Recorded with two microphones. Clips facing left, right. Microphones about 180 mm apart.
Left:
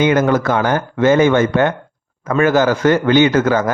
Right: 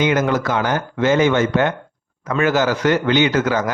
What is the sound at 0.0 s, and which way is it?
A man's voice, 50° left (ahead or behind).